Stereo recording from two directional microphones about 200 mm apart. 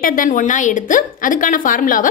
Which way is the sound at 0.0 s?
45° left (ahead or behind).